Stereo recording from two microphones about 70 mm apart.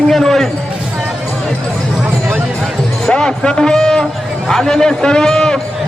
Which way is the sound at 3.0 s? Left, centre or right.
Centre.